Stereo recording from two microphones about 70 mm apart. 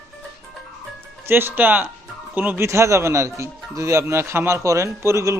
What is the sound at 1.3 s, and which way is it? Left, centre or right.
Speech, right.